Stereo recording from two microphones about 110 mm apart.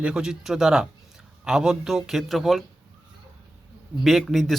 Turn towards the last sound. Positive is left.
turn(degrees=0)  # may be behind; listen again after turning